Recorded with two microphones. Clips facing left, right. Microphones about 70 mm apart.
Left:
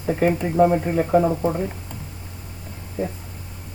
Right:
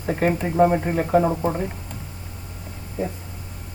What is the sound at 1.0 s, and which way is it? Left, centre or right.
Speech, centre.